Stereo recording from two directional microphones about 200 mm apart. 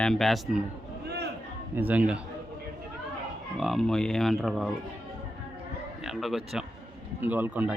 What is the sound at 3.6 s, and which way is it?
Speech, centre (ahead or behind).